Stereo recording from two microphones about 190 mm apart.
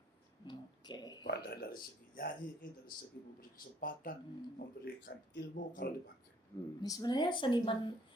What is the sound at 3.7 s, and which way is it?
A man's voice, 45° left (ahead or behind).